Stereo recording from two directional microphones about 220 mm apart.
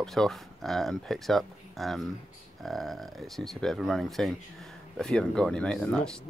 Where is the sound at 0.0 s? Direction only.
Centre (ahead or behind).